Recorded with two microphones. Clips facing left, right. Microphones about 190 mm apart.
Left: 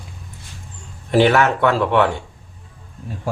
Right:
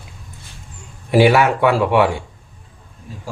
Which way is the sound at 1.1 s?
10° right (ahead or behind).